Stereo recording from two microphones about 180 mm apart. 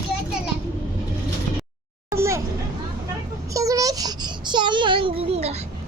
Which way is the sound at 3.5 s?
20° right (ahead or behind).